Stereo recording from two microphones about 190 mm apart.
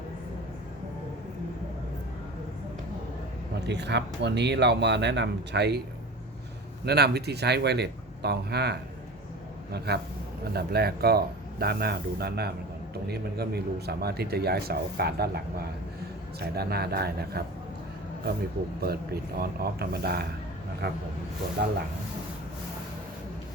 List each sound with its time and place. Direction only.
3.5 s speech: 65° right (ahead or behind)
6.8 s speech: 60° right (ahead or behind)
16.4 s speech: 55° right (ahead or behind)
18.9 s speech: 55° right (ahead or behind)